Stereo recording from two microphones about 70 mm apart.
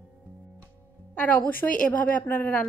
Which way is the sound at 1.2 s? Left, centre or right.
Left.